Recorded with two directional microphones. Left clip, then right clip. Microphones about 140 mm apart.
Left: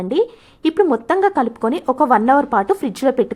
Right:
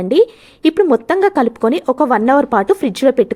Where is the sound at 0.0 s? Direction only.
30° right (ahead or behind).